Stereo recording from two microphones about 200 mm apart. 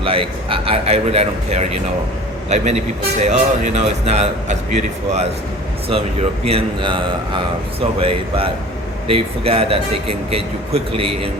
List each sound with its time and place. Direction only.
0.0 s speech: 25° right (ahead or behind)
6.4 s speech: 25° right (ahead or behind)